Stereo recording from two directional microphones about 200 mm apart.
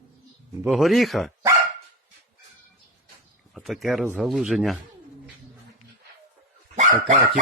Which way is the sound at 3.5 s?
Centre (ahead or behind).